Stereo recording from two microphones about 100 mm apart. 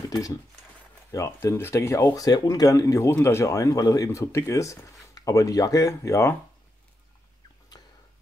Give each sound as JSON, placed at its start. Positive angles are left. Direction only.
{"t": 0.1, "sound": "speech", "side_deg": 35}
{"t": 2.0, "sound": "speech", "side_deg": 40}
{"t": 7.7, "sound": "fowl", "side_deg": 40}